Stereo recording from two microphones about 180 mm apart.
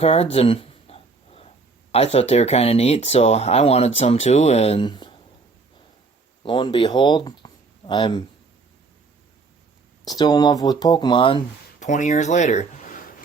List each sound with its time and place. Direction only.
0.0 s speech: 35° left (ahead or behind)
6.4 s speech: 25° left (ahead or behind)
10.1 s speech: 20° left (ahead or behind)
11.8 s speech: 45° left (ahead or behind)